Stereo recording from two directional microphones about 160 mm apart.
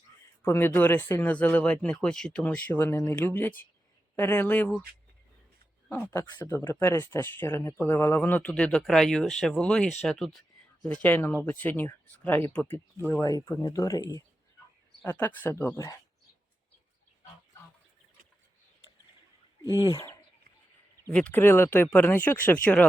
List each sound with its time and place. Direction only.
0.4 s speech: 15° left (ahead or behind)
5.9 s speech: 15° left (ahead or behind)
15.0 s speech: 10° left (ahead or behind)
21.1 s speech: 10° left (ahead or behind)